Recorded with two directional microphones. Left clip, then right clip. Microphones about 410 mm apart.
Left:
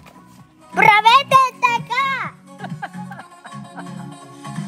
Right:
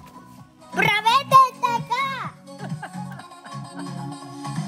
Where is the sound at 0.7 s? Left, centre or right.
Centre.